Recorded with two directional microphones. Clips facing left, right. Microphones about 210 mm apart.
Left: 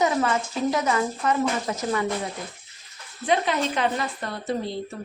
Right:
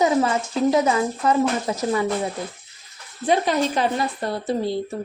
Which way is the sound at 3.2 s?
40° right (ahead or behind).